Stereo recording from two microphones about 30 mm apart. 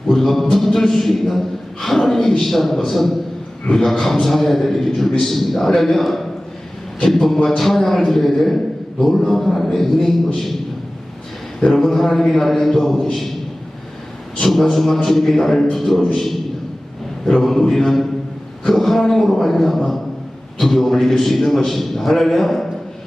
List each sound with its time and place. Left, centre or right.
0.1 s a man's voice: centre
11.6 s a man's voice: centre
14.4 s a man's voice: centre
17.4 s a man's voice: centre